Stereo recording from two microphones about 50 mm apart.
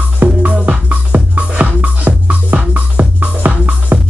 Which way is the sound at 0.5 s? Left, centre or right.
Right.